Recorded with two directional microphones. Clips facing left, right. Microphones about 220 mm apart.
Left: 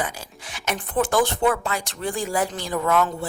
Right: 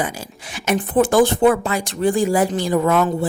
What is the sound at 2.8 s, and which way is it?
Speech, 25° right (ahead or behind).